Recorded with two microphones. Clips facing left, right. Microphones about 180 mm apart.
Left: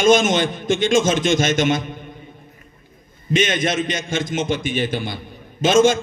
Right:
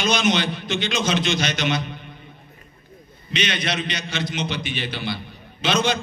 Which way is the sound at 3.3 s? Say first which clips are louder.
Left 6 dB; 45° left (ahead or behind).